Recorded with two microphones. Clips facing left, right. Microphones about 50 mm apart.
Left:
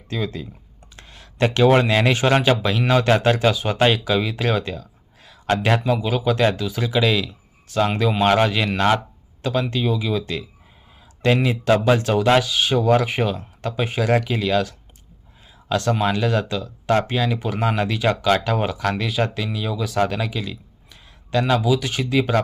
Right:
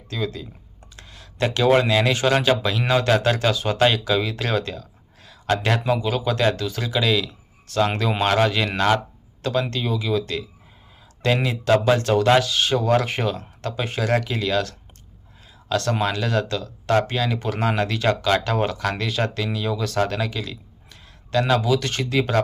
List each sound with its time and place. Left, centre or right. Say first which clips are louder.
0.1 s speech: left 1 dB; left
0.9 s a sound: left 3 dB; left
2.0 s speech: left 2 dB; left
3.2 s speech: left 2 dB; centre
7.3 s a sound: left 1 dB; centre
8.2 s speech: left 2 dB; centre
11.4 s speech: right 1 dB; centre